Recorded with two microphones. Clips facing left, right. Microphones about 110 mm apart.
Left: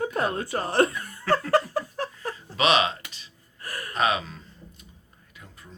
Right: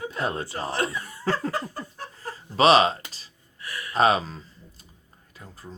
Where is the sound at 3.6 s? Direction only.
45° left (ahead or behind).